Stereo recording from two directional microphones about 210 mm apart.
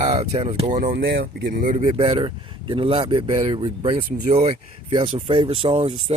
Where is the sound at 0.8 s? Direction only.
50° right (ahead or behind).